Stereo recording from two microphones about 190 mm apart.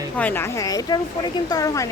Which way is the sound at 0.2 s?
10° left (ahead or behind).